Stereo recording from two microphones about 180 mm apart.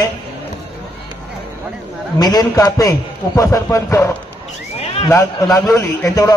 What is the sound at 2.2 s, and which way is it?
A man's voice, 20° left (ahead or behind).